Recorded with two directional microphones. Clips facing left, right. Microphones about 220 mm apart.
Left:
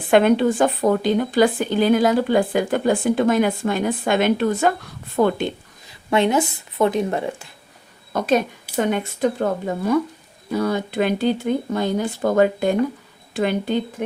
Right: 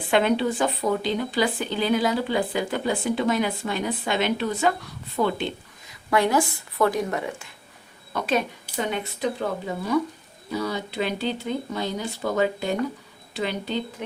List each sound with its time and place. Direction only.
0.1 s speech: 50° left (ahead or behind)
5.9 s a woman's voice: 25° left (ahead or behind)
8.1 s speech: 45° left (ahead or behind)